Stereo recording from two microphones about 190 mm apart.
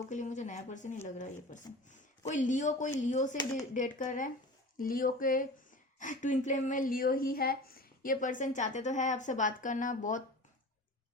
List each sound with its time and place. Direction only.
0.1 s speech: 40° left (ahead or behind)